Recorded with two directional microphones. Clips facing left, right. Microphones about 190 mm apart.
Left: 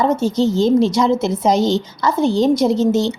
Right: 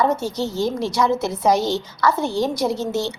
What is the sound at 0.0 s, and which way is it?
A woman's voice, 20° left (ahead or behind).